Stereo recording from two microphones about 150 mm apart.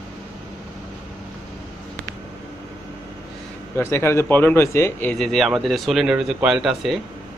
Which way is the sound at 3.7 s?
15° left (ahead or behind).